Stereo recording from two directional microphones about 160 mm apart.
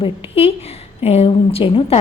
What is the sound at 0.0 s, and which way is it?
A woman's voice, 40° left (ahead or behind).